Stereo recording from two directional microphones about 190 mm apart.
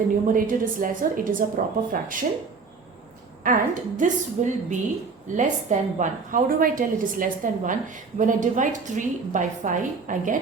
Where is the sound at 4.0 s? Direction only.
40° right (ahead or behind).